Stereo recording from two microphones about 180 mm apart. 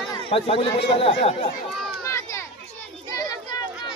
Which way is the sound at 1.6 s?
Centre (ahead or behind).